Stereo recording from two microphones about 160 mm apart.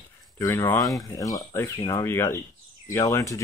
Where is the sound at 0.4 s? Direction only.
15° left (ahead or behind).